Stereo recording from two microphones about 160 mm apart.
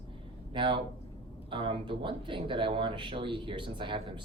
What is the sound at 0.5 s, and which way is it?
Speech, 30° right (ahead or behind).